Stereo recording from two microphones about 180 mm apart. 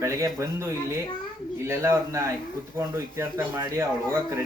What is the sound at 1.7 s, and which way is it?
A man's voice, 15° right (ahead or behind).